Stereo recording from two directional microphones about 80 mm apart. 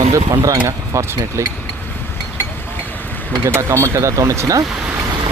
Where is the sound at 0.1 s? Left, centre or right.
Right.